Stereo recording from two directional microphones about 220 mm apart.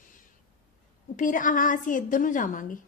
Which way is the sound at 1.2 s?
35° left (ahead or behind).